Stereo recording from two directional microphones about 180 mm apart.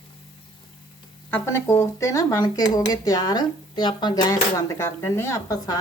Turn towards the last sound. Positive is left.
turn(degrees=15)  # may be behind; listen again after turning